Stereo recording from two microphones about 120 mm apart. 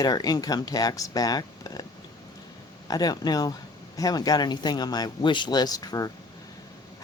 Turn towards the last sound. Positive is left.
turn(degrees=35)  # may be behind; listen again after turning